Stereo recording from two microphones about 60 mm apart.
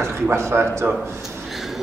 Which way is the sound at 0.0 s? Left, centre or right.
Right.